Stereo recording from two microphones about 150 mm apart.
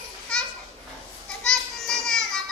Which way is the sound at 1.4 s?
5° left (ahead or behind).